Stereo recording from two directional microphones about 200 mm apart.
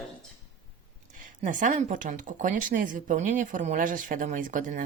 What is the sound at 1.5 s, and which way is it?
Speech, 40° right (ahead or behind).